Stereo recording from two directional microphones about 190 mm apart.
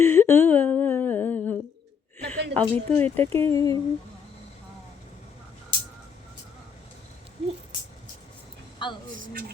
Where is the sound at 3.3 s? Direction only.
15° left (ahead or behind).